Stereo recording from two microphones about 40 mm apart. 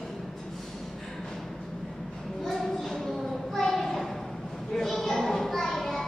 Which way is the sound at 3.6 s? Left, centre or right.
Centre.